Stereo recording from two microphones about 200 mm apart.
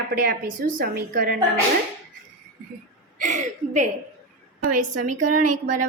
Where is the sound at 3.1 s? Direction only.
40° right (ahead or behind).